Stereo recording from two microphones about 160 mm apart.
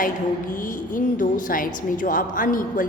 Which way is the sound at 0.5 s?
55° left (ahead or behind).